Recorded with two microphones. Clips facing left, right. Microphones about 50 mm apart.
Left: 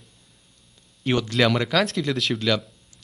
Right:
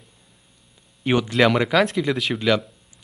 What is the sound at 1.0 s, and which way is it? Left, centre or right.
Speech, centre.